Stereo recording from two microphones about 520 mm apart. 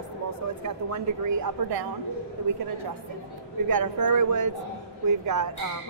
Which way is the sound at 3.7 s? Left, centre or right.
Right.